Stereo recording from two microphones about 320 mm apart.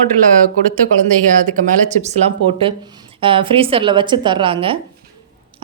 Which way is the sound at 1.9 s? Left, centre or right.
Right.